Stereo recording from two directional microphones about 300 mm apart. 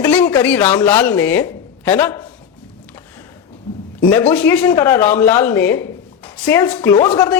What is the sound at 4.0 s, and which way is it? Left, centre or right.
A man's voice, centre.